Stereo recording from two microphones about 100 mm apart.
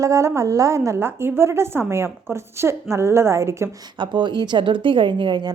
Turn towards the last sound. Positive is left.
turn(degrees=-50)  # may be behind; listen again after turning